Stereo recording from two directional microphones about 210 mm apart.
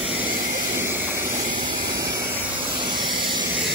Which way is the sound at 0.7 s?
10° right (ahead or behind).